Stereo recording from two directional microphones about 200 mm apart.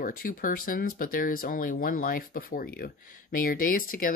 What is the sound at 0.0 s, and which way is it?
Speech, 45° left (ahead or behind).